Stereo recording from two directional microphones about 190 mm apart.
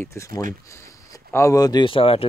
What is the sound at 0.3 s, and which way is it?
Speech, 45° right (ahead or behind).